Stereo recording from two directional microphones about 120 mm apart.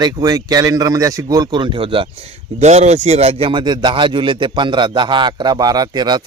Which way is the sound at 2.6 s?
70° right (ahead or behind).